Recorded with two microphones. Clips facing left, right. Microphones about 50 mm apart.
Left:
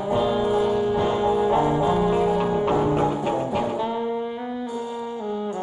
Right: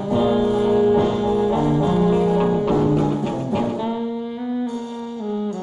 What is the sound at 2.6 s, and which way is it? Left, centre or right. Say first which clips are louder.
Music: right 2 dB; centre.